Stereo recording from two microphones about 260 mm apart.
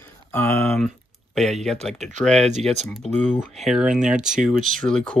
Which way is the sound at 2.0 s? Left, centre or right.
Right.